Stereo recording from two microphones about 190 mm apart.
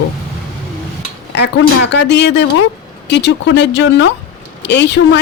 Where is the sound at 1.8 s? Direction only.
65° left (ahead or behind).